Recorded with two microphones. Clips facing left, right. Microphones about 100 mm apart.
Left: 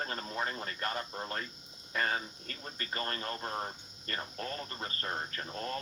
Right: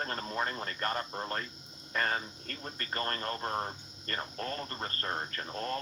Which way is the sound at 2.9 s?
45° right (ahead or behind).